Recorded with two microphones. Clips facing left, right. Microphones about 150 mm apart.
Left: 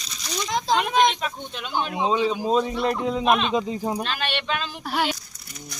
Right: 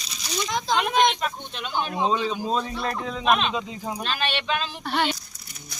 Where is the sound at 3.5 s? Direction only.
35° left (ahead or behind).